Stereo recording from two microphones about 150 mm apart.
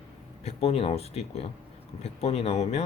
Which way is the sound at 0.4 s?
40° left (ahead or behind).